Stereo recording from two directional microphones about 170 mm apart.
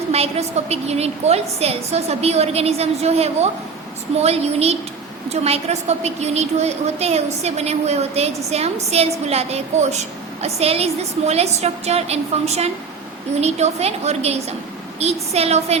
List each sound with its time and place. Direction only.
0.1 s a woman's voice: 40° right (ahead or behind)